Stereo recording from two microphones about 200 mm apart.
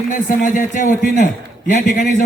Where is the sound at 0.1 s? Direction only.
40° left (ahead or behind).